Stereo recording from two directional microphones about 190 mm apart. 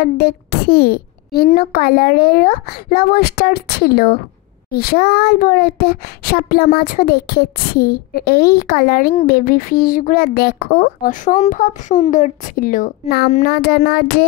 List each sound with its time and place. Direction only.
0.0 s a child's voice: 55° left (ahead or behind)